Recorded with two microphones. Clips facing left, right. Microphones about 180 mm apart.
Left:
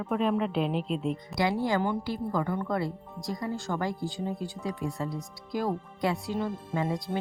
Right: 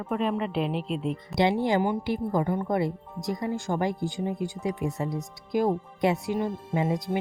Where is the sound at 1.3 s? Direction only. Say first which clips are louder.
Right 4 dB; 20° right (ahead or behind).